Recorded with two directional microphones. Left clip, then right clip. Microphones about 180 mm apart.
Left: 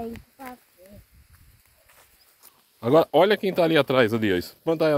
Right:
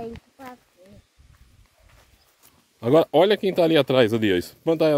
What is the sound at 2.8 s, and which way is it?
Speech, 45° right (ahead or behind).